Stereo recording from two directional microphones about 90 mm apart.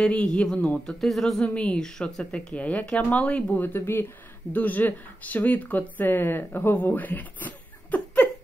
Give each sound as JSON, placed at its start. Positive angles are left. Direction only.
{"t": 0.0, "sound": "a woman's voice", "side_deg": 10}